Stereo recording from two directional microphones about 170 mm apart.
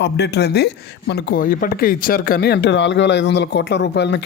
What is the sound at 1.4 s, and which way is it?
Speech, 55° left (ahead or behind).